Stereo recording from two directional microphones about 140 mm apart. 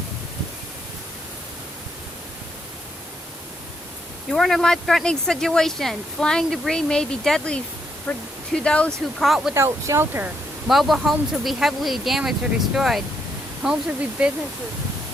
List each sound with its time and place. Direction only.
4.3 s speech: centre (ahead or behind)
9.6 s speech: 20° right (ahead or behind)
10.7 s speech: centre (ahead or behind)